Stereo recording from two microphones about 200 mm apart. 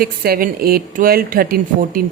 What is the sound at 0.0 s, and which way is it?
A woman's voice, 45° right (ahead or behind).